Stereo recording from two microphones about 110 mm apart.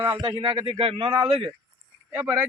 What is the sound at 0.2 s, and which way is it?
A man's voice, 50° right (ahead or behind).